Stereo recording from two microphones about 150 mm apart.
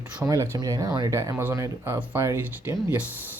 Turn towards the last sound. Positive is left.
turn(degrees=-10)  # may be behind; listen again after turning